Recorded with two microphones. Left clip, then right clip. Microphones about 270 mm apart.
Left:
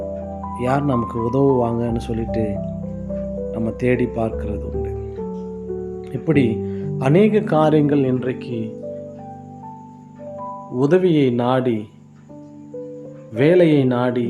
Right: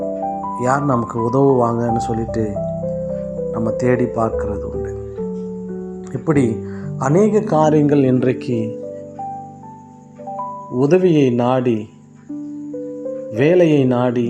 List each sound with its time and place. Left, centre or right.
0.5 s speech: centre
1.4 s speech: centre
1.6 s speech: centre
3.5 s speech: centre
6.2 s speech: centre
7.4 s speech: centre
7.9 s speech: centre
10.8 s speech: centre
13.3 s speech: centre